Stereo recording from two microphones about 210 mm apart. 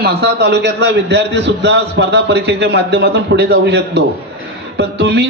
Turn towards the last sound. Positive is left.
turn(degrees=-55)  # may be behind; listen again after turning